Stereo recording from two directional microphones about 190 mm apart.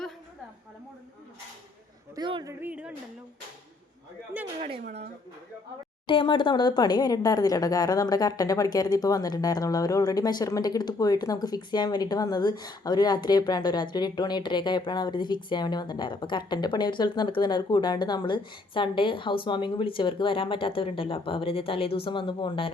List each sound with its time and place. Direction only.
2.1 s a man's voice: 20° right (ahead or behind)
2.5 s speech: 10° right (ahead or behind)
6.1 s speech: 25° left (ahead or behind)